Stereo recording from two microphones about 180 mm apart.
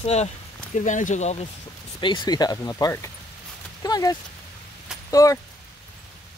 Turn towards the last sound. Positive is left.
turn(degrees=20)  # may be behind; listen again after turning